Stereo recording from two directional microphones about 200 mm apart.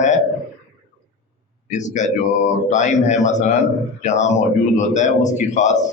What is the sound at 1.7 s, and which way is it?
A man's voice, 35° left (ahead or behind).